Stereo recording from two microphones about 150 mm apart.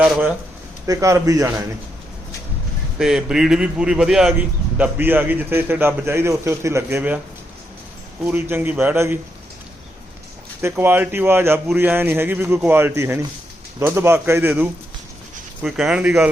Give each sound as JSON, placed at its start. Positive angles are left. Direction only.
{"t": 0.0, "sound": "speech", "side_deg": -5}
{"t": 0.9, "sound": "a man's voice", "side_deg": -20}
{"t": 3.0, "sound": "a man's voice", "side_deg": -5}
{"t": 4.8, "sound": "speech", "side_deg": -15}
{"t": 8.2, "sound": "speech", "side_deg": -10}
{"t": 10.6, "sound": "speech", "side_deg": -15}